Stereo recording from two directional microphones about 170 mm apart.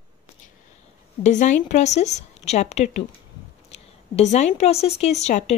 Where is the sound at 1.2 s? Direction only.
45° left (ahead or behind).